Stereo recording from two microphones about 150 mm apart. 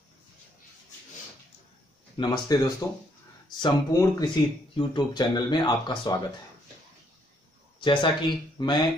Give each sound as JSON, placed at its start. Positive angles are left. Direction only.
{"t": 2.1, "sound": "speech", "side_deg": 30}
{"t": 7.8, "sound": "speech", "side_deg": 35}